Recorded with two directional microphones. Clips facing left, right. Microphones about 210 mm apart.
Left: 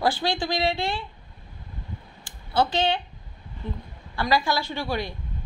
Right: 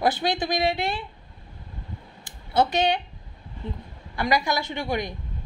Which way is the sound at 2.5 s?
20° right (ahead or behind).